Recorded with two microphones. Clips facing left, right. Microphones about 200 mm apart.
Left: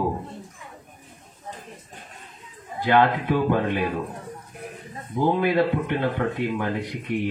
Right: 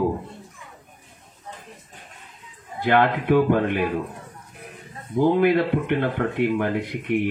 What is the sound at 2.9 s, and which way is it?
Speech, 55° right (ahead or behind).